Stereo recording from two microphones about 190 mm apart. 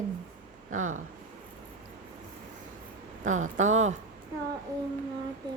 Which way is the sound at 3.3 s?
40° right (ahead or behind).